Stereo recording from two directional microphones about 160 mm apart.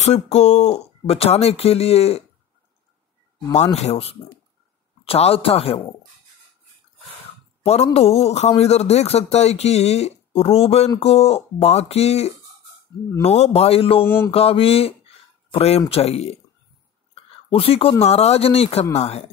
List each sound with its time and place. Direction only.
0.0 s a man's voice: 45° left (ahead or behind)
3.5 s a man's voice: 45° left (ahead or behind)
7.6 s a man's voice: 40° left (ahead or behind)
14.0 s mantra: 15° left (ahead or behind)
14.3 s a man's voice: 35° left (ahead or behind)
17.1 s a sound: 35° left (ahead or behind)
18.0 s a man's voice: 40° left (ahead or behind)